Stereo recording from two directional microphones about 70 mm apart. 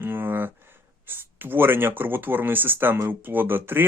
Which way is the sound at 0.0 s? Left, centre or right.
Right.